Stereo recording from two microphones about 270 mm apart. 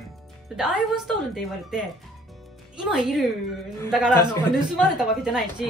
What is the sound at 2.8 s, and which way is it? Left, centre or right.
A woman's voice, centre.